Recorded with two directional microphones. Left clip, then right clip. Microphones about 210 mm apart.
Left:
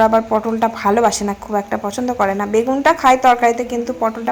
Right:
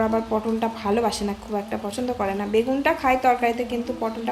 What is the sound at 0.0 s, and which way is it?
Speech, 15° left (ahead or behind).